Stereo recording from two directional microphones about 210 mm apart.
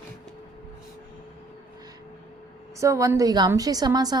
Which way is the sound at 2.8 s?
15° right (ahead or behind).